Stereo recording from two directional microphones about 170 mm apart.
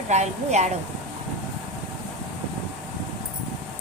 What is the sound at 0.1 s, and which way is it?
Speech, 40° right (ahead or behind).